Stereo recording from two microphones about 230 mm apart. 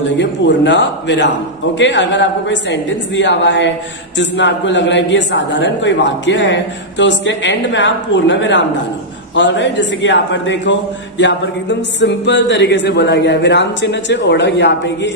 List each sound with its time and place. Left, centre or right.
0.2 s a man's voice: left